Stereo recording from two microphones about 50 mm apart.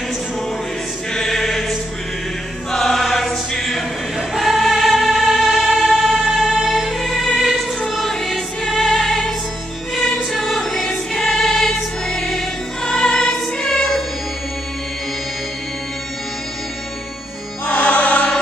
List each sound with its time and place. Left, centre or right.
1.1 s music: centre
2.7 s choir: centre
6.6 s music: centre
9.9 s choir: centre
17.6 s music: left